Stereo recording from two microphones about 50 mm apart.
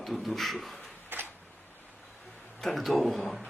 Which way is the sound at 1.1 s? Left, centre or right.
Right.